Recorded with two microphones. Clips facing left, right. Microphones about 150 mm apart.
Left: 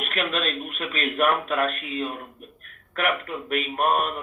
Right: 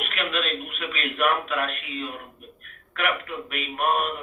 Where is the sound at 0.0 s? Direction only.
40° left (ahead or behind).